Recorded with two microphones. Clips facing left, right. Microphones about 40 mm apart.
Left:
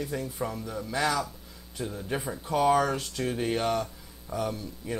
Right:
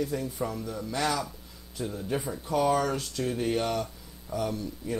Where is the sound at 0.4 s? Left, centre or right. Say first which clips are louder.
Even; centre.